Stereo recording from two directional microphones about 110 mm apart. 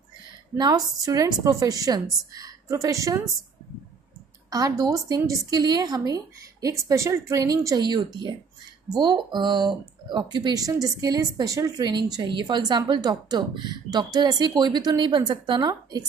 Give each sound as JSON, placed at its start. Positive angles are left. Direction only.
{"t": 0.6, "sound": "speech", "side_deg": -40}
{"t": 4.5, "sound": "speech", "side_deg": -30}